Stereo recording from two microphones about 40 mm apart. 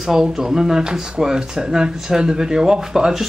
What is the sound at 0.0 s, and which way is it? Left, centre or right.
Speech, centre.